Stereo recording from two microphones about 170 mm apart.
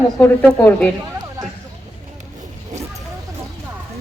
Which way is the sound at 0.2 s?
10° left (ahead or behind).